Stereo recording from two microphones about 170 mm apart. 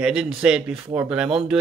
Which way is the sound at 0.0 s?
5° right (ahead or behind).